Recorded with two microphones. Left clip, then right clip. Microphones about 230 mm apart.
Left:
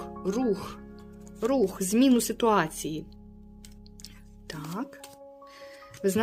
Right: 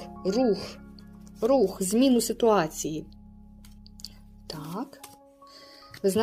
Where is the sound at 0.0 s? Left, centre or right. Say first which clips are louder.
Right 4 dB; centre.